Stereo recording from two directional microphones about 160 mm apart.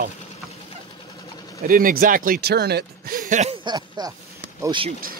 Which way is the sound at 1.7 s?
60° right (ahead or behind).